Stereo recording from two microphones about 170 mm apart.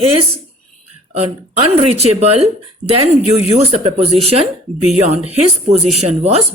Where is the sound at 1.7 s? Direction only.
35° right (ahead or behind).